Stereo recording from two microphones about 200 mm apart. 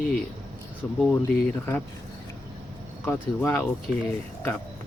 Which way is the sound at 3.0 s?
10° left (ahead or behind).